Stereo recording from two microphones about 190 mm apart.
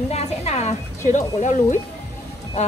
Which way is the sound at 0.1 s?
35° left (ahead or behind).